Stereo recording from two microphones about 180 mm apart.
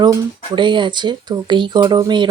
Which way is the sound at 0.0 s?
20° right (ahead or behind).